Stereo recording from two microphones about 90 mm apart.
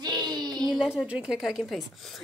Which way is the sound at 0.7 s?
5° right (ahead or behind).